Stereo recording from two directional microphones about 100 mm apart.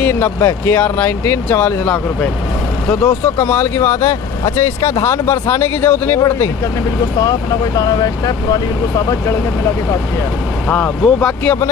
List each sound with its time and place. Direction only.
0.4 s speech: 30° left (ahead or behind)
3.3 s speech: 20° left (ahead or behind); by 5.2 s 40° left (ahead or behind)
5.2 s speech: 25° left (ahead or behind); by 9.0 s 40° left (ahead or behind)
10.7 s speech: 15° left (ahead or behind)